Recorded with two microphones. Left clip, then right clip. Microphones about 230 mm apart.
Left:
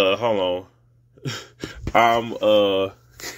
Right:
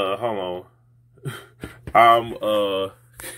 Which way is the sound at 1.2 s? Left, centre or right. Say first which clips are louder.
Left 4 dB; left.